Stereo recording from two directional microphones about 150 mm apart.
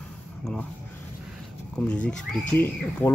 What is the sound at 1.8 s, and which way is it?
Speech, 10° left (ahead or behind).